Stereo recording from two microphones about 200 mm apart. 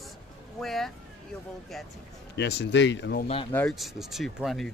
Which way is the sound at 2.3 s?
60° left (ahead or behind).